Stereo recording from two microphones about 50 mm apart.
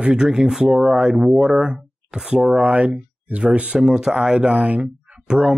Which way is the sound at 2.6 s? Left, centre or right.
Right.